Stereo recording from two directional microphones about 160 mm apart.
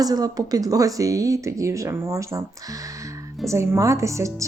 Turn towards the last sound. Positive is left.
turn(degrees=-20)  # may be behind; listen again after turning